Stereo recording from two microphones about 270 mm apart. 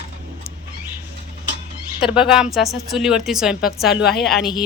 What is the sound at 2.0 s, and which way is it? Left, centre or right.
Speech, centre.